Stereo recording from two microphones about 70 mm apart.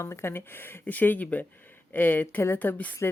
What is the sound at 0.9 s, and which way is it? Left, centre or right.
Speech, left.